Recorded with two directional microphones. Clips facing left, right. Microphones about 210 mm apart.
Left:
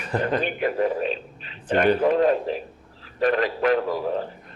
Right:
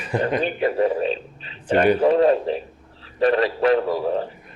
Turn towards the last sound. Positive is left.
turn(degrees=-30)  # may be behind; listen again after turning